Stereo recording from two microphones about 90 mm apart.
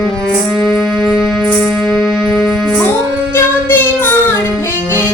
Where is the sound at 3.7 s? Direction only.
25° left (ahead or behind).